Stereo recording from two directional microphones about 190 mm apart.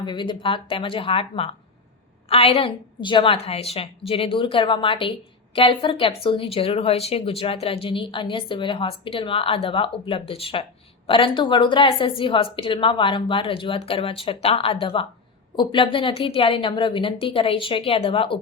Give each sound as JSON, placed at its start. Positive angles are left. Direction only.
{"t": 0.0, "sound": "speech", "side_deg": 25}